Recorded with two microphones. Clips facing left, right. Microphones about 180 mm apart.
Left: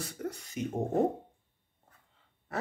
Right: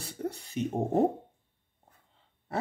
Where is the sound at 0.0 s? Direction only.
30° right (ahead or behind).